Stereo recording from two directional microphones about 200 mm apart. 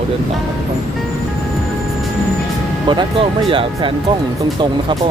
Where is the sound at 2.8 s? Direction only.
25° right (ahead or behind).